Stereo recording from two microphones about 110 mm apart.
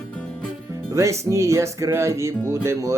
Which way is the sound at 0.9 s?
25° right (ahead or behind).